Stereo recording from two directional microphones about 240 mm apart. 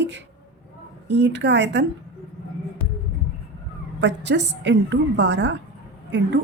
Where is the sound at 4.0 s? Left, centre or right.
Right.